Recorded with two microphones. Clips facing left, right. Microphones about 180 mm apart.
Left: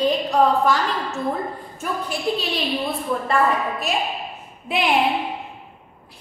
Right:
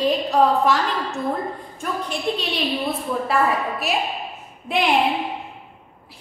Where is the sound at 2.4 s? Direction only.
Centre (ahead or behind).